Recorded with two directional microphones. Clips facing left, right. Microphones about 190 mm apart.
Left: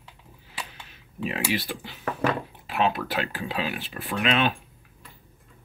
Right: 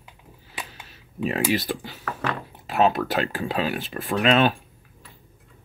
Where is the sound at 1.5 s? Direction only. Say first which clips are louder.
Right 4 dB; 40° right (ahead or behind).